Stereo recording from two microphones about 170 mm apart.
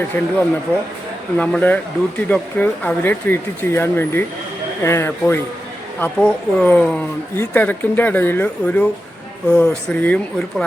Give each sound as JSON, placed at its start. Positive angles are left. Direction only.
{"t": 0.1, "sound": "speech", "side_deg": 10}
{"t": 1.4, "sound": "speech", "side_deg": 10}